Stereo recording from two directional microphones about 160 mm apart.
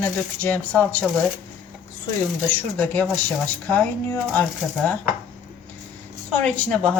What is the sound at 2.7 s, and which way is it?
A woman's voice, 10° left (ahead or behind).